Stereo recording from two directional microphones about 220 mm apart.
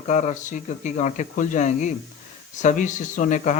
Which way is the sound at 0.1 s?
35° left (ahead or behind).